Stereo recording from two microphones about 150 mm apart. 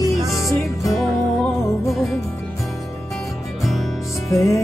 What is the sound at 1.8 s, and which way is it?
Music, centre (ahead or behind).